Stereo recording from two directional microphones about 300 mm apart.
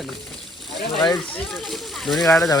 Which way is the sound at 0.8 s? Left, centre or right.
Centre.